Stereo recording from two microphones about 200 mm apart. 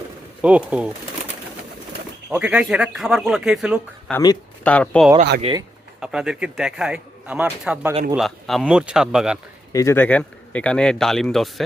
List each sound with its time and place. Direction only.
0.4 s speech: 5° right (ahead or behind)
2.3 s a man's voice: 5° right (ahead or behind)
5.4 s speech: 25° right (ahead or behind)
6.0 s a man's voice: 5° right (ahead or behind)
9.7 s a man's voice: 10° left (ahead or behind)